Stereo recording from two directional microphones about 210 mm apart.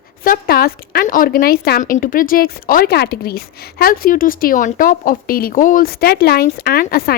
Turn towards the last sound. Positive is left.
turn(degrees=45)  # may be behind; listen again after turning